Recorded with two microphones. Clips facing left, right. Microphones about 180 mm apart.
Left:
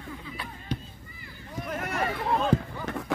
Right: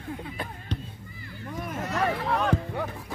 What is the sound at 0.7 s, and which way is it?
Chop, 10° left (ahead or behind).